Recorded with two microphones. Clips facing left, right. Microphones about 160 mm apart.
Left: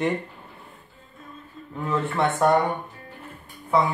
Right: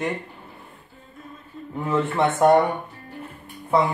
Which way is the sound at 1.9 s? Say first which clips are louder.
Right 2 dB; 20° right (ahead or behind).